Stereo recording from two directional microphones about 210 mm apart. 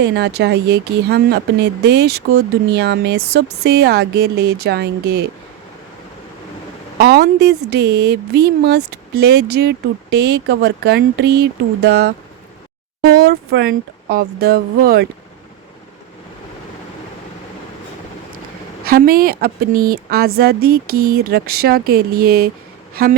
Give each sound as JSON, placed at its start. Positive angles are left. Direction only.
{"t": 0.0, "sound": "speech", "side_deg": -55}
{"t": 7.0, "sound": "speech", "side_deg": -50}
{"t": 18.9, "sound": "speech", "side_deg": -45}